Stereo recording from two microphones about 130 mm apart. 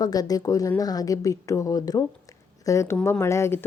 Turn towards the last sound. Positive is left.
turn(degrees=20)  # may be behind; listen again after turning